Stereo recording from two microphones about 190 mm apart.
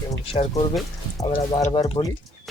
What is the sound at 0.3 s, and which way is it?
Speech, 30° left (ahead or behind).